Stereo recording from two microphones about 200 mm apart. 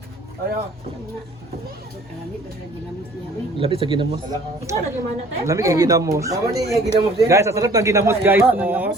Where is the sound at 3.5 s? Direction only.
25° right (ahead or behind); by 8.9 s 10° right (ahead or behind).